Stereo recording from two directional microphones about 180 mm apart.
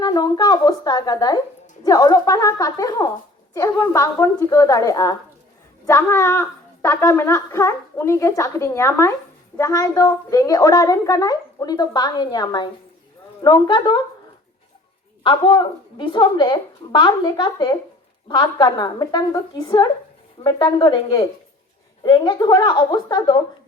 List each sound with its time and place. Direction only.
0.0 s a woman's voice: 25° left (ahead or behind)
15.2 s a woman's voice: 25° left (ahead or behind)